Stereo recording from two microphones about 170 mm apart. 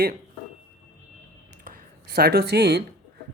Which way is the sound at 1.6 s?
60° right (ahead or behind).